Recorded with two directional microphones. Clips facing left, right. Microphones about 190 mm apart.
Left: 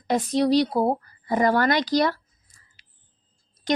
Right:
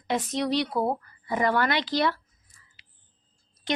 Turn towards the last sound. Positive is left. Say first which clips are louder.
# left 5 dB
turn(degrees=40)  # may be behind; listen again after turning